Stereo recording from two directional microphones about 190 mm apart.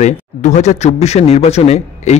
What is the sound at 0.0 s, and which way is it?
A man's voice, 40° left (ahead or behind).